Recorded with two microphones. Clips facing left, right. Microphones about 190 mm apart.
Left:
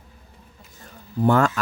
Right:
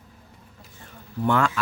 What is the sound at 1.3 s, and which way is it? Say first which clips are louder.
Speech: left 3 dB; 40° left (ahead or behind).